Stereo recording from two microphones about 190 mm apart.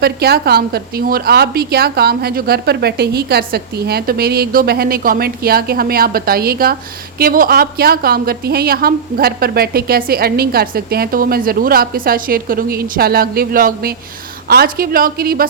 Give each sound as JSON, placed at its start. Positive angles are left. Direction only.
{"t": 0.0, "sound": "a woman's voice", "side_deg": -55}